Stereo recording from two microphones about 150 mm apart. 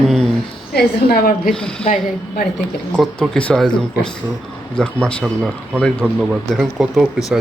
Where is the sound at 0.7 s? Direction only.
90° left.